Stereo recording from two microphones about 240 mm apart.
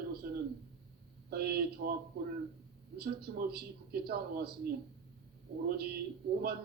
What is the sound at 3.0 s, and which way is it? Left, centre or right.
A man's voice, right.